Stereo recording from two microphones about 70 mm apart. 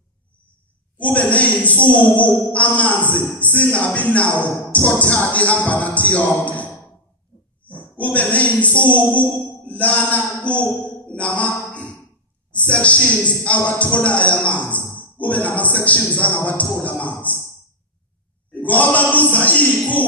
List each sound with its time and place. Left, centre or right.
0.9 s a woman's voice: left
18.6 s a man's voice: left